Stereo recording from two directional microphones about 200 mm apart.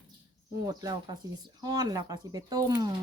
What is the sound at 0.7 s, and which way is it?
Speech, 20° right (ahead or behind).